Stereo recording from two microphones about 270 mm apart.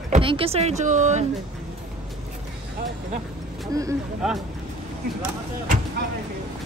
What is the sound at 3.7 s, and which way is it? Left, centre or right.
Speech, centre.